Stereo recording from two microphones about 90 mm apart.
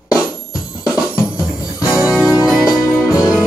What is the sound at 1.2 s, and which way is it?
Music, 40° left (ahead or behind).